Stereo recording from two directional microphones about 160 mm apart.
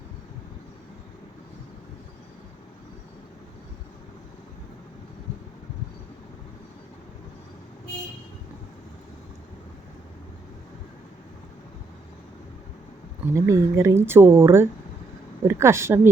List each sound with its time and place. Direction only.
13.3 s speech: 20° right (ahead or behind)